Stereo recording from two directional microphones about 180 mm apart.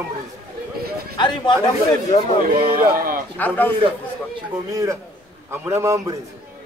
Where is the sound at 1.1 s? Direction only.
25° left (ahead or behind).